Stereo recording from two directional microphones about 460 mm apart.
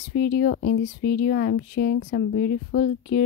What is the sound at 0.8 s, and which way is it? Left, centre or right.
Speech, centre.